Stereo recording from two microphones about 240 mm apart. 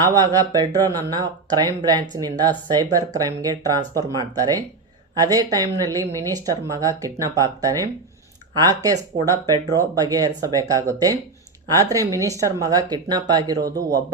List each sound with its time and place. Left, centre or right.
0.0 s speech: centre